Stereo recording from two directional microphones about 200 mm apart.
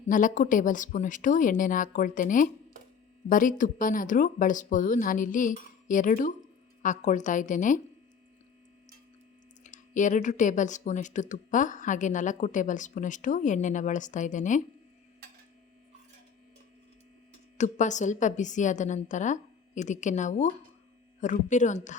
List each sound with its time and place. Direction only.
0.1 s speech: 40° left (ahead or behind)
9.6 s speech: 40° left (ahead or behind)
17.6 s speech: 35° left (ahead or behind)